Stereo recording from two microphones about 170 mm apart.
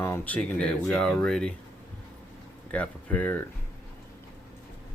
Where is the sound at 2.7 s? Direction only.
10° left (ahead or behind).